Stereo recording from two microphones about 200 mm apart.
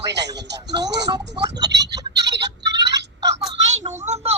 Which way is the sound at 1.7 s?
60° right (ahead or behind).